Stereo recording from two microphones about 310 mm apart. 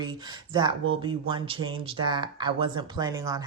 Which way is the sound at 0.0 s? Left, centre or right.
Centre.